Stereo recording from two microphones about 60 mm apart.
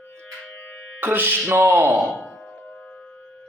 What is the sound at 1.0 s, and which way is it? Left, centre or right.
Speech, right.